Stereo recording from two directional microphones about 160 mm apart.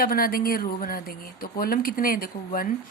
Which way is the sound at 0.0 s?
65° left (ahead or behind).